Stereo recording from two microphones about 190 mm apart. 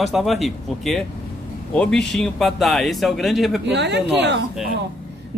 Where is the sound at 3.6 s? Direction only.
65° right (ahead or behind).